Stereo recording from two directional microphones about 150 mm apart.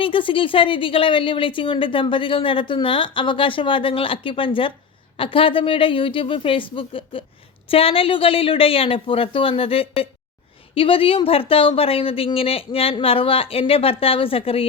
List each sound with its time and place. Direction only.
0.0 s a woman's voice: 35° left (ahead or behind)